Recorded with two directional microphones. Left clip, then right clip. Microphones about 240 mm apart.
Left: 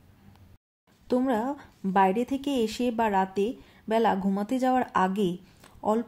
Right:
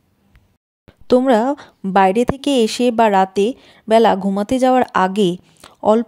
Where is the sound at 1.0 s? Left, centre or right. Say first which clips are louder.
Right 13 dB; right.